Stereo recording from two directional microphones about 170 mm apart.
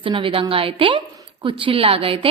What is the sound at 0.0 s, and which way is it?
A woman's voice, 30° right (ahead or behind).